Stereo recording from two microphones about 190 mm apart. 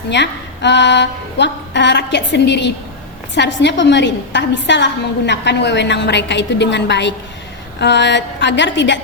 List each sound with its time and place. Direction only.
0.1 s a woman's voice: 70° left (ahead or behind)